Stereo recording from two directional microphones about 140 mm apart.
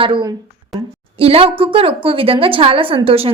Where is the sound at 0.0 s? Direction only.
35° right (ahead or behind).